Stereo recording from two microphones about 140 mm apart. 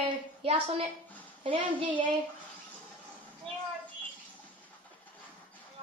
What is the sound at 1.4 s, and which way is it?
Speech, 35° right (ahead or behind).